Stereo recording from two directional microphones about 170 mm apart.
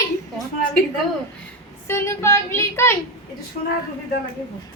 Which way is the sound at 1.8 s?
15° left (ahead or behind).